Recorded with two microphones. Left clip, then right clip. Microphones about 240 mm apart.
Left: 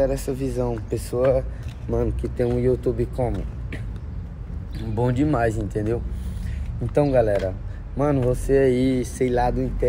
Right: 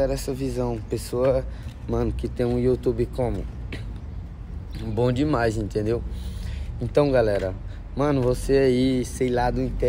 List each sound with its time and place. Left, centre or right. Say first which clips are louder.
0.0 s speech: left 2 dB; centre